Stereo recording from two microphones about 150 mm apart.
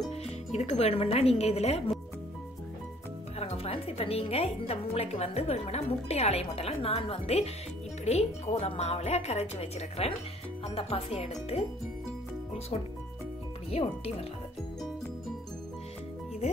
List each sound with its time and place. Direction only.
0.1 s speech: 45° left (ahead or behind)
3.3 s speech: 40° left (ahead or behind)
13.7 s speech: 40° left (ahead or behind)